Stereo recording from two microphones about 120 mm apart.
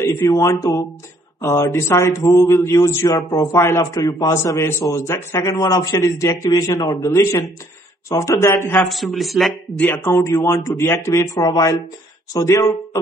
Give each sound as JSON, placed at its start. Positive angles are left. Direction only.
{"t": 0.0, "sound": "a man's voice", "side_deg": 25}
{"t": 8.7, "sound": "speech", "side_deg": 0}
{"t": 9.8, "sound": "a man's voice", "side_deg": 20}